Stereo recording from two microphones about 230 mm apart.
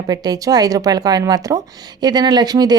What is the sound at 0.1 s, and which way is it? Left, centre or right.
A woman's voice, centre.